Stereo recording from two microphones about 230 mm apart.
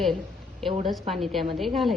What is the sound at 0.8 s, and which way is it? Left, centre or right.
A woman's voice, centre.